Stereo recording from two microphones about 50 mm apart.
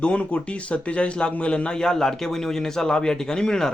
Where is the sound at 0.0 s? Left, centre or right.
Left.